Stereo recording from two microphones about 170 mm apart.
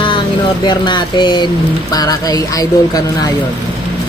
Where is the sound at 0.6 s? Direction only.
25° left (ahead or behind).